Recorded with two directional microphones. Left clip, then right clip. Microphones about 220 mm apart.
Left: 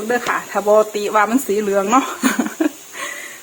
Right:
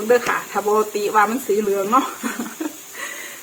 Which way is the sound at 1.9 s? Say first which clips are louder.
Left 3 dB; 45° left (ahead or behind).